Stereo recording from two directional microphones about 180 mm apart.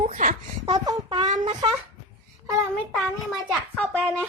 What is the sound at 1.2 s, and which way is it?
Speech, 40° right (ahead or behind).